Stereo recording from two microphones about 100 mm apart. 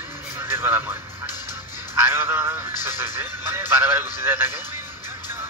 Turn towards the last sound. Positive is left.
turn(degrees=-20)  # may be behind; listen again after turning